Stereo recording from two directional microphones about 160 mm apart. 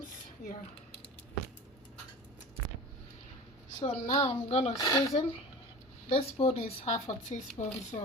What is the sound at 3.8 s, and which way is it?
Speech, 35° left (ahead or behind).